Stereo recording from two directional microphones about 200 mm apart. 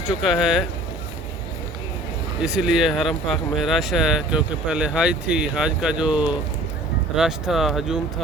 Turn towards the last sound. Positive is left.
turn(degrees=0)  # may be behind; listen again after turning